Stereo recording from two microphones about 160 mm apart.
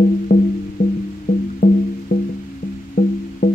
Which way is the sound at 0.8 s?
55° left (ahead or behind).